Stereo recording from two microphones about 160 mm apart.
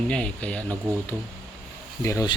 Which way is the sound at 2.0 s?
20° left (ahead or behind).